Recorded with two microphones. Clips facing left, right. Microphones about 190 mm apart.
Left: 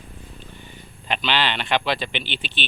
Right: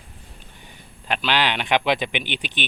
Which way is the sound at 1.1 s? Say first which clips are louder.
Right 1 dB; 10° right (ahead or behind).